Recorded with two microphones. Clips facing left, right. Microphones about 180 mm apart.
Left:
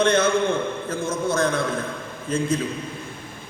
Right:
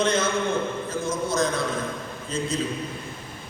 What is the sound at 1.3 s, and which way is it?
A man's voice, 55° left (ahead or behind).